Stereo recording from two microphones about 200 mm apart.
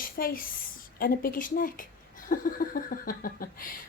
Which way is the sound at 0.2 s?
45° left (ahead or behind).